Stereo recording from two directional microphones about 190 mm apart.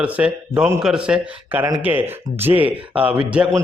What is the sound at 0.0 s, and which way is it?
A man's voice, 5° right (ahead or behind).